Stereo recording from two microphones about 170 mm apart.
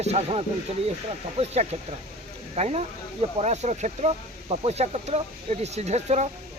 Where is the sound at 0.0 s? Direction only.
35° right (ahead or behind).